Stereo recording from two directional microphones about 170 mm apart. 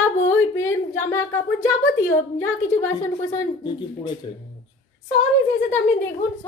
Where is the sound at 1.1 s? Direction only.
15° left (ahead or behind).